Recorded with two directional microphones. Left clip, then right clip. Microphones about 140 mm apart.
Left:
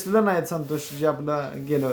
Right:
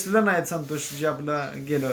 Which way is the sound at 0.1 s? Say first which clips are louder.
Left 1 dB; 30° left (ahead or behind).